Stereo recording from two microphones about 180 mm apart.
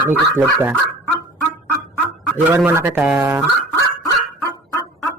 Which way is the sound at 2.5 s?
10° right (ahead or behind).